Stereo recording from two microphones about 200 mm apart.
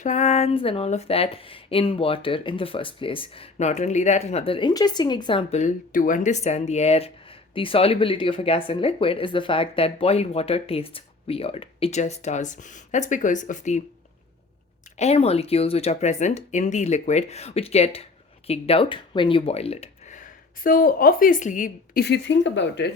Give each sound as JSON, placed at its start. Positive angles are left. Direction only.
{"t": 0.0, "sound": "speech", "side_deg": 35}
{"t": 14.9, "sound": "speech", "side_deg": 30}
{"t": 22.0, "sound": "speech", "side_deg": 60}